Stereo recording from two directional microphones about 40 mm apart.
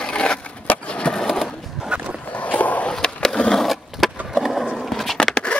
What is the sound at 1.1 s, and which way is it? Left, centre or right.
Skateboard, centre.